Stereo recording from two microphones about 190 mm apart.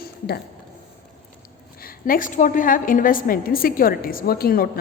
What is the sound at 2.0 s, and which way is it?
A woman's voice, 45° left (ahead or behind).